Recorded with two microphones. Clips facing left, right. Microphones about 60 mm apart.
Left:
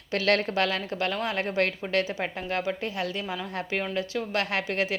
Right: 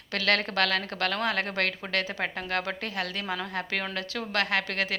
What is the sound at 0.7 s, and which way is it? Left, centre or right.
A woman's voice, right.